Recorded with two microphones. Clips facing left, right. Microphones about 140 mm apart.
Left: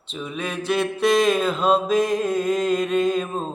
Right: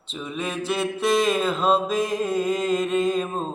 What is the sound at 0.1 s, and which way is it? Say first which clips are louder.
Mantra: even; centre (ahead or behind).